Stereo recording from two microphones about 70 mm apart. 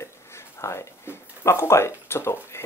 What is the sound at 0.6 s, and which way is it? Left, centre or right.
Speech, left.